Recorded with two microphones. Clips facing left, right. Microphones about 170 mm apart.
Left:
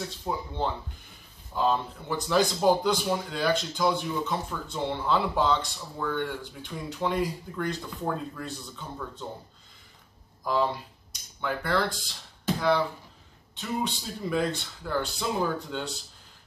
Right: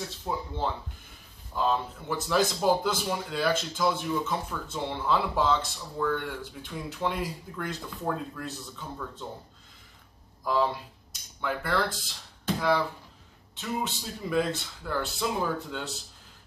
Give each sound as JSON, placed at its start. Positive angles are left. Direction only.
{"t": 0.3, "sound": "a man's voice", "side_deg": 5}
{"t": 1.6, "sound": "a man's voice", "side_deg": 0}
{"t": 10.4, "sound": "a man's voice", "side_deg": 0}